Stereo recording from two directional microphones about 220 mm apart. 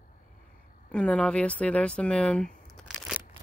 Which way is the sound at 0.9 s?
5° left (ahead or behind).